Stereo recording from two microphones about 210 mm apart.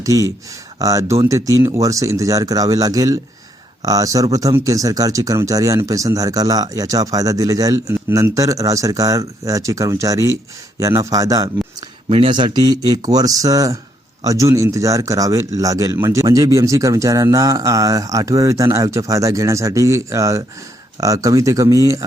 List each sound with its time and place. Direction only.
0.0 s speech: 15° right (ahead or behind)
12.0 s speech: 25° right (ahead or behind)